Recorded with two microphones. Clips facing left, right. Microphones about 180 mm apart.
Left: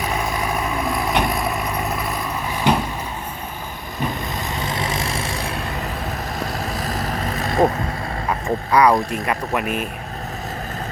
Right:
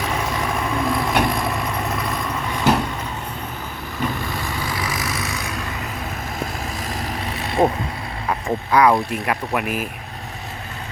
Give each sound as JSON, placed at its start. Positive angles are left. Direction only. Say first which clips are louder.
{"t": 0.9, "sound": "vehicle", "louder": "right 1 dB", "side_deg": 0}
{"t": 4.4, "sound": "vehicle", "louder": "left 1 dB", "side_deg": 25}
{"t": 6.7, "sound": "vehicle", "louder": "left 3 dB", "side_deg": 40}
{"t": 8.4, "sound": "speech", "louder": "even", "side_deg": -5}